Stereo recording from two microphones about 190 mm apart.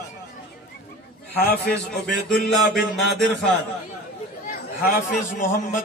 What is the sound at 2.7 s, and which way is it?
Mantra, centre (ahead or behind).